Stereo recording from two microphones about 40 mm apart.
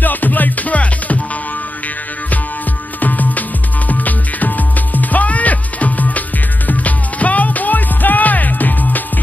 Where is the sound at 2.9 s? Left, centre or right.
Left.